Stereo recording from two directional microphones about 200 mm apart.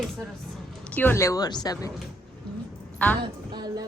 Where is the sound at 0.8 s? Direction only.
10° left (ahead or behind).